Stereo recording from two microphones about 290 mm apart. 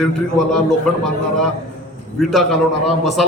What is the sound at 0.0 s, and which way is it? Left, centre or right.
Speech, centre.